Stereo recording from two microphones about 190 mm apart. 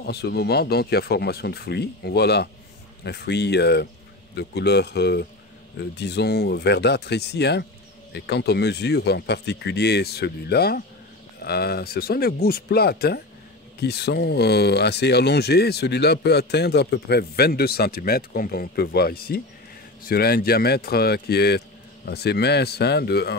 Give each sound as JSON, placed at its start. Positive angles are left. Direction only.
{"t": 0.0, "sound": "speech", "side_deg": 60}